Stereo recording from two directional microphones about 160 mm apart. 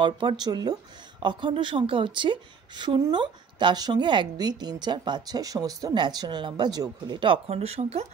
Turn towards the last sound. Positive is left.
turn(degrees=-40)  # may be behind; listen again after turning